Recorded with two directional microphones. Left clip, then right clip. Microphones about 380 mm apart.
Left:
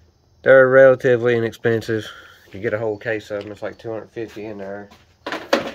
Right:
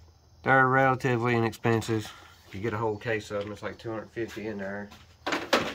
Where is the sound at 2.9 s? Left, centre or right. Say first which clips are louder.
Left 6 dB; centre.